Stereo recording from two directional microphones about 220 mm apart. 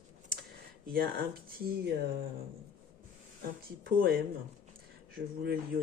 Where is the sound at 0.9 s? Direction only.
45° right (ahead or behind).